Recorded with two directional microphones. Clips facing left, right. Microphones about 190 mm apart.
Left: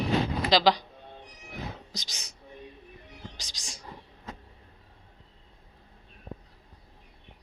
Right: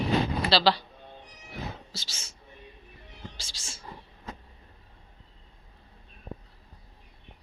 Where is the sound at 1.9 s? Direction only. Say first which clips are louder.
Left 1 dB; 15° left (ahead or behind).